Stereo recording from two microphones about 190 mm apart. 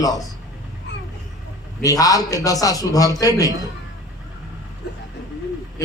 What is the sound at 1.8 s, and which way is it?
A man's voice, 20° left (ahead or behind).